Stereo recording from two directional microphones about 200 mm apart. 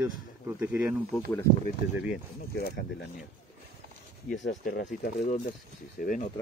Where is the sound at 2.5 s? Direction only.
50° left (ahead or behind).